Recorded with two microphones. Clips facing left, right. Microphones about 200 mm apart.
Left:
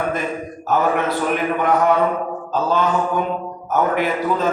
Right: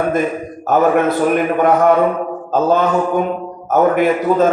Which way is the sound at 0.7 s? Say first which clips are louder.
Right 6 dB; 50° right (ahead or behind).